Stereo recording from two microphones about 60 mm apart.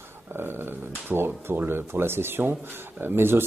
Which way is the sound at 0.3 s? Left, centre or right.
Right.